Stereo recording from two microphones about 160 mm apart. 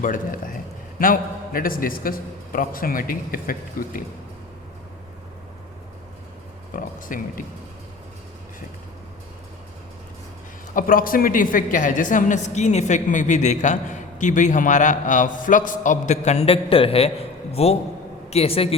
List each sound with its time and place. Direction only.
0.0 s a man's voice: 60° left (ahead or behind)
6.7 s speech: 60° left (ahead or behind)
10.8 s a man's voice: 60° left (ahead or behind); by 18.7 s 35° left (ahead or behind)